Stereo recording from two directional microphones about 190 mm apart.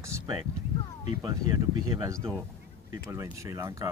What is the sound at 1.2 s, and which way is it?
Speech, 20° right (ahead or behind).